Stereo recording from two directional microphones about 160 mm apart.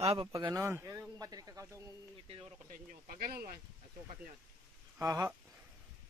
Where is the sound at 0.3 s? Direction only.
20° right (ahead or behind).